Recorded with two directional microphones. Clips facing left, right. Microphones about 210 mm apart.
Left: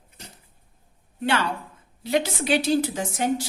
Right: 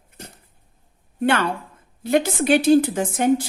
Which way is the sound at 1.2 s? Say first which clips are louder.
Right 4 dB; 55° right (ahead or behind).